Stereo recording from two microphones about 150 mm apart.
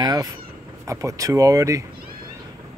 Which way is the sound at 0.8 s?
20° right (ahead or behind).